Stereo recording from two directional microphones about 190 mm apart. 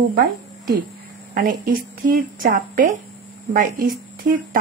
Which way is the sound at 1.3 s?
50° right (ahead or behind).